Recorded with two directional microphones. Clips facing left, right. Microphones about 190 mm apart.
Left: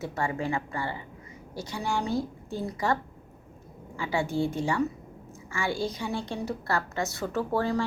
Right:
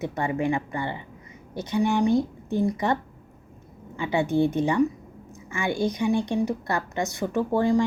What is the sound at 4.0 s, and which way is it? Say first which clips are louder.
A woman's voice: right 5 dB; 20° right (ahead or behind).